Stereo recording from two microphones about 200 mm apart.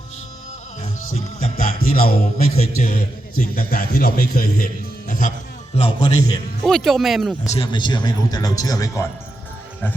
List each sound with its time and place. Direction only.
0.8 s music: 35° left (ahead or behind)
2.6 s a man's voice: 35° left (ahead or behind)
5.7 s a man's voice: 25° left (ahead or behind)
6.6 s speech: centre (ahead or behind)
7.4 s a man's voice: 30° left (ahead or behind)